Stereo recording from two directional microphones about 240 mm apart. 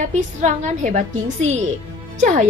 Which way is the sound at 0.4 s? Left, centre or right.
Right.